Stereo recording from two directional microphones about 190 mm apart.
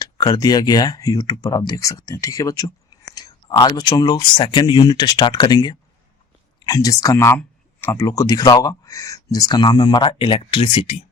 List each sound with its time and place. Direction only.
0.0 s speech: 20° left (ahead or behind)